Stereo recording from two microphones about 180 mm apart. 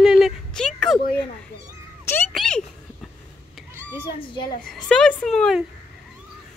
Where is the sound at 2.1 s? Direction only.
10° left (ahead or behind).